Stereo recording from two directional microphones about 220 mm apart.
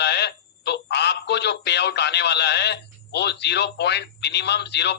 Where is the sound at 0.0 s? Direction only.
50° left (ahead or behind).